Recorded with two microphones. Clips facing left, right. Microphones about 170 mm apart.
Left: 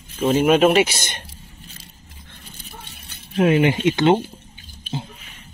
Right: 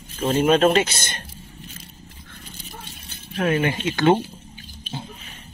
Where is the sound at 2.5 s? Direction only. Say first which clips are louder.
Right 1 dB; 60° left (ahead or behind).